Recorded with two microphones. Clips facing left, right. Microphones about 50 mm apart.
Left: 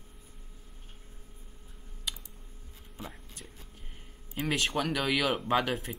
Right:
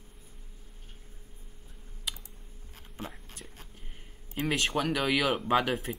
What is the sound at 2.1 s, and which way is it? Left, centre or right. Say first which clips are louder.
Typing: even; centre.